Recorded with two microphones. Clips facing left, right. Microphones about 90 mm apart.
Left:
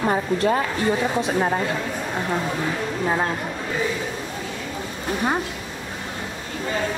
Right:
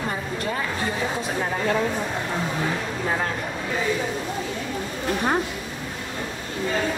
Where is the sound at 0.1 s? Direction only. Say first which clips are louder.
Left 7 dB; 45° left (ahead or behind).